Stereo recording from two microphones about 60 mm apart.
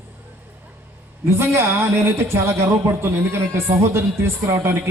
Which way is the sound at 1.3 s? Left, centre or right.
Right.